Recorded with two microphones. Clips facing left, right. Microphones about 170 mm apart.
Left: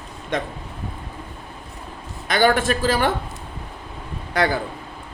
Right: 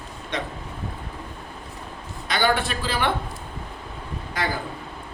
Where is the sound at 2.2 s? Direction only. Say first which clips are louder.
Left 5 dB; 50° left (ahead or behind).